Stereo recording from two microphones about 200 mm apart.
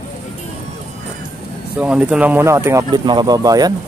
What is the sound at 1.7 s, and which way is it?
Speech, 5° right (ahead or behind).